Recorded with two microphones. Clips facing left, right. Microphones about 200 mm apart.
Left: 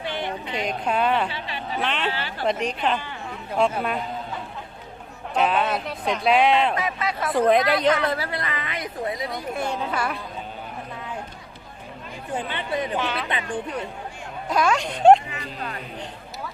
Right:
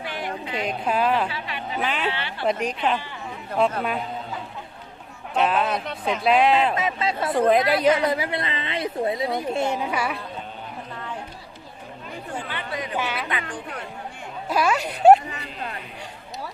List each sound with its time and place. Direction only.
0.0 s a sound: 25° left (ahead or behind)
0.5 s speech: centre (ahead or behind)
1.3 s speech: 30° left (ahead or behind)
1.8 s speech: 5° right (ahead or behind)
5.3 s speech: centre (ahead or behind)
6.7 s a woman's voice: 25° right (ahead or behind)
7.3 s a woman's voice: centre (ahead or behind)
12.4 s chatter: 20° left (ahead or behind)
13.0 s speech: 10° right (ahead or behind)
13.5 s speech: 20° left (ahead or behind)
14.5 s speech: 5° right (ahead or behind)